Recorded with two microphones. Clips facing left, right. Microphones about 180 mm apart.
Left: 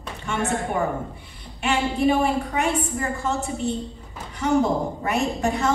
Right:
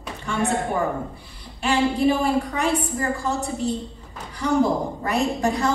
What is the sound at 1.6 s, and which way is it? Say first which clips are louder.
A woman's voice: right 2 dB; 35° right (ahead or behind).